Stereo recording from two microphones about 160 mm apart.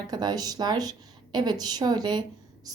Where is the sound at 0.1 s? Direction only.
25° right (ahead or behind).